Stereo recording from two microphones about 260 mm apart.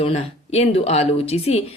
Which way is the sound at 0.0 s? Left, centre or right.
Left.